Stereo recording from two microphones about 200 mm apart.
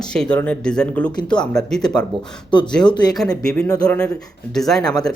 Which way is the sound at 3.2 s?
5° left (ahead or behind).